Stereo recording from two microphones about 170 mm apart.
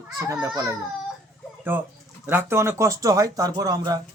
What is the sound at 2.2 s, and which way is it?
Speech, 10° right (ahead or behind).